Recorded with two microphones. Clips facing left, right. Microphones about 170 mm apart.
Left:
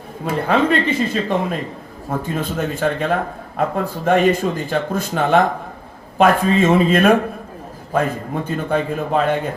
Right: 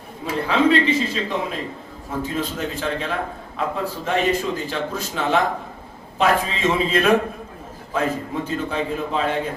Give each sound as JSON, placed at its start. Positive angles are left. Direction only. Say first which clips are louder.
{"t": 0.3, "sound": "speech", "louder": "left 1 dB", "side_deg": 55}
{"t": 8.4, "sound": "speech", "louder": "left 6 dB", "side_deg": 55}